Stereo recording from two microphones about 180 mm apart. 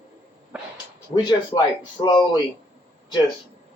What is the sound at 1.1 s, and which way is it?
Speech, 25° left (ahead or behind).